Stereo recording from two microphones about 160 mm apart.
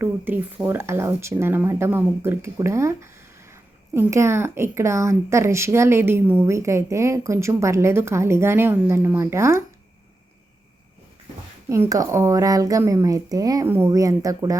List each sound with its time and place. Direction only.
0.0 s speech: 15° right (ahead or behind)
11.7 s a woman's voice: 20° right (ahead or behind)